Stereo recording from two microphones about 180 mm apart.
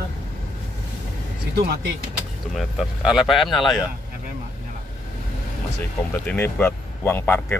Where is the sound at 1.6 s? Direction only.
60° right (ahead or behind).